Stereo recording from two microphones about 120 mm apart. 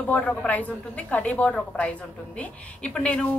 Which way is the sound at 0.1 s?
10° left (ahead or behind).